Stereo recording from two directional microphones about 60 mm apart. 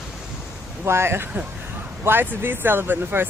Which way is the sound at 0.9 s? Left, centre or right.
Right.